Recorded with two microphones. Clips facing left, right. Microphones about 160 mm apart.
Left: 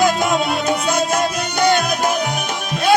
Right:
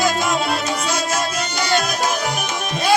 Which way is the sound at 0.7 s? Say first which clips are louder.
Left 4 dB; 55° left (ahead or behind).